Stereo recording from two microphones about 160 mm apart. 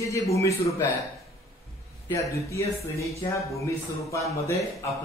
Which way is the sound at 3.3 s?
20° left (ahead or behind).